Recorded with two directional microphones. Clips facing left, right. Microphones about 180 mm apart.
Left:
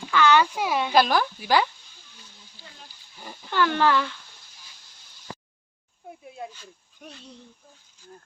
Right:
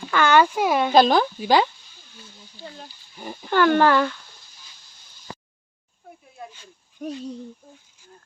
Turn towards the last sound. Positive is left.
turn(degrees=-35)  # may be behind; listen again after turning